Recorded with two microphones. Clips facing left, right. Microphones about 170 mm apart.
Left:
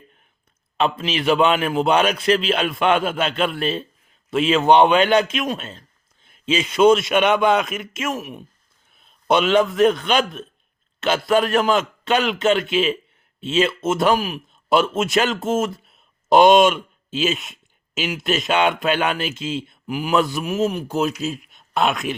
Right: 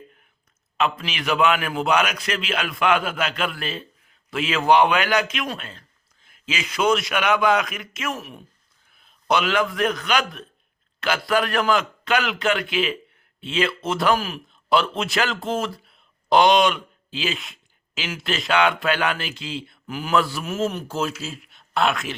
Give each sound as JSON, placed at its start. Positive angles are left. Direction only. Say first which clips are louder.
{"t": 0.8, "sound": "a man's voice", "louder": "left 4 dB", "side_deg": 30}